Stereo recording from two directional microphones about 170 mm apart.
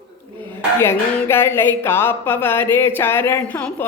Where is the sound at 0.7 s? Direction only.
15° left (ahead or behind).